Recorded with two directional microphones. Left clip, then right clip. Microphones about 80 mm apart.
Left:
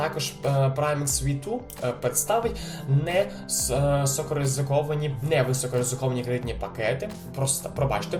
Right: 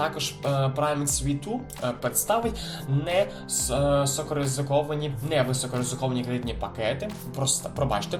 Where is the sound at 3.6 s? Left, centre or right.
Right.